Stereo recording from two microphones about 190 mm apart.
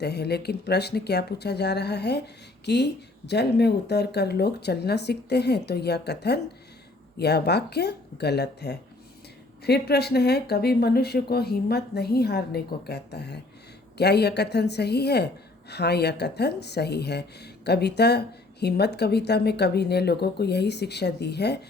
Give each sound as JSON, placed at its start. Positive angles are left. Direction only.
{"t": 0.0, "sound": "speech", "side_deg": 60}